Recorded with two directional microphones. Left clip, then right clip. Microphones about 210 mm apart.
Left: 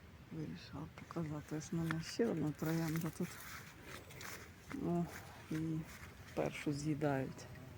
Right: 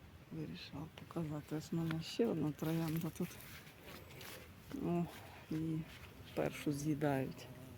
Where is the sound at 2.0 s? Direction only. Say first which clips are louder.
Right 1 dB; 20° right (ahead or behind).